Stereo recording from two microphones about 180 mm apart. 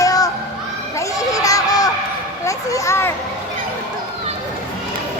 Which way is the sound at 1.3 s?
20° left (ahead or behind).